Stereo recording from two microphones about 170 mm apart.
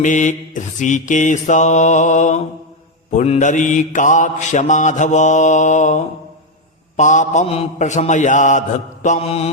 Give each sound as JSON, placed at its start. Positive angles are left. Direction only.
{"t": 0.0, "sound": "mantra", "side_deg": 45}